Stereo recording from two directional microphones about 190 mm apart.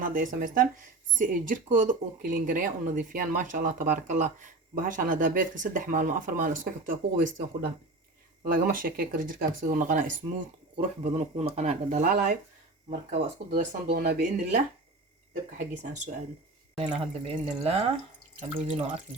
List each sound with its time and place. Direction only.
0.0 s speech: 45° right (ahead or behind)
13.5 s speech: 55° right (ahead or behind)
16.7 s speech: 25° right (ahead or behind)